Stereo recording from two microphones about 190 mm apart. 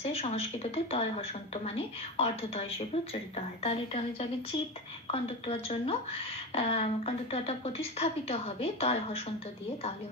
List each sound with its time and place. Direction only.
0.0 s speech: 35° left (ahead or behind)